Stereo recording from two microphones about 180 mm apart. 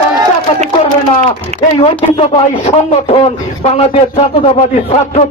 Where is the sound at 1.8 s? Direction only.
35° left (ahead or behind).